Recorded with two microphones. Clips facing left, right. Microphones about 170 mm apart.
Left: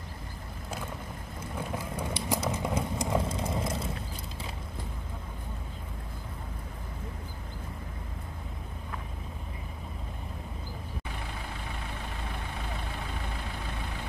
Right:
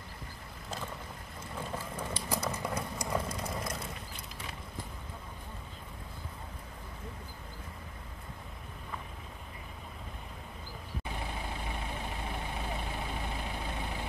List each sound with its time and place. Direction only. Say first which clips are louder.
1.6 s vehicle: left 3 dB; 15° left (ahead or behind)
11.9 s vehicle: right 1 dB; 20° right (ahead or behind)